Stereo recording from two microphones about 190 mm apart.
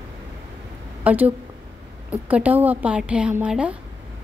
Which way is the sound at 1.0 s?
10° right (ahead or behind).